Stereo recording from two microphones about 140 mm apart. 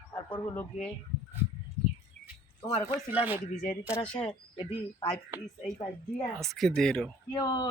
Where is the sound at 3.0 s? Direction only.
15° right (ahead or behind).